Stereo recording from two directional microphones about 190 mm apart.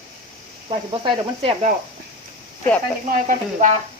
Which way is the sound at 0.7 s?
25° right (ahead or behind).